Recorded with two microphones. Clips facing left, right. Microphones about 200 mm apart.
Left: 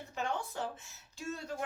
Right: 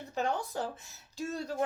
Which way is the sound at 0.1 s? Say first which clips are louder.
Right 5 dB; 35° right (ahead or behind).